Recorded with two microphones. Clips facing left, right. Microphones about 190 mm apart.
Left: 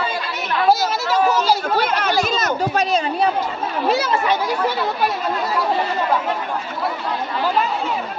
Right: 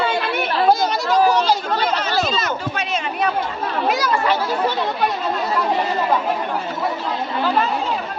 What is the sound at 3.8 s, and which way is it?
Speech, 25° left (ahead or behind).